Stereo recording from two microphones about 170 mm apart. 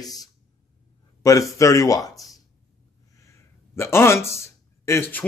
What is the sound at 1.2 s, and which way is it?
Speech, 20° left (ahead or behind).